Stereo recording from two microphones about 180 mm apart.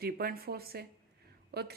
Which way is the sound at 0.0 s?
55° right (ahead or behind).